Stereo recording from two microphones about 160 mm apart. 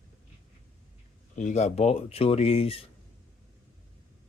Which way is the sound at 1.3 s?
50° left (ahead or behind).